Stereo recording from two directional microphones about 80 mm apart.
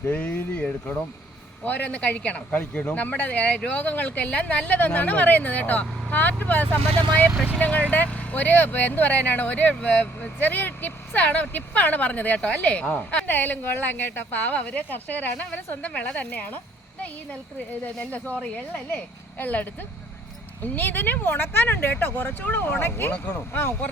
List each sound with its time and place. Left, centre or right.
0.0 s speech: left
17.8 s speech: centre
20.7 s speech: left